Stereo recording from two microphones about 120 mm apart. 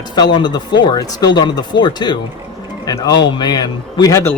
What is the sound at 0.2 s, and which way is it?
Speech, 40° left (ahead or behind).